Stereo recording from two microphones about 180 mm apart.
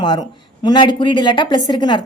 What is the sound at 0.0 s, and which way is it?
A woman's voice, 25° left (ahead or behind).